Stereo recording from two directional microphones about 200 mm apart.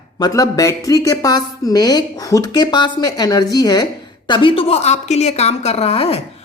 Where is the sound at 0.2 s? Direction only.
15° left (ahead or behind).